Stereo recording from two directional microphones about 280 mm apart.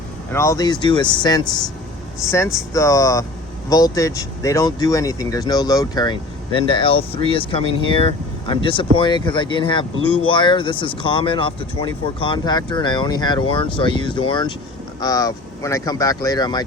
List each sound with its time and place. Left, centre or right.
0.3 s speech: centre
2.7 s speech: centre